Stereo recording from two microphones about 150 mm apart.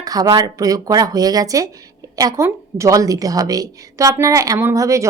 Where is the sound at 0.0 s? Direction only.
25° right (ahead or behind).